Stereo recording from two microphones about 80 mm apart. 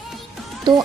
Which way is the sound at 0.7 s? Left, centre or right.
Right.